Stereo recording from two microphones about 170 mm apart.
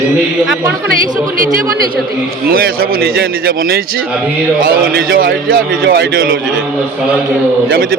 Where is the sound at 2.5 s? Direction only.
60° right (ahead or behind).